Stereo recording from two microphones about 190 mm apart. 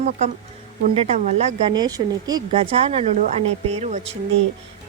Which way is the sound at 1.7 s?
20° right (ahead or behind).